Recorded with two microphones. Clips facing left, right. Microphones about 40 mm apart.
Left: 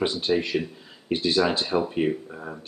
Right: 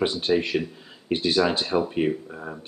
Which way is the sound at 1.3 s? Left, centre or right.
Centre.